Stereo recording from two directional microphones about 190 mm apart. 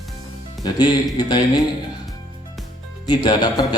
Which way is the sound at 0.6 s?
20° left (ahead or behind).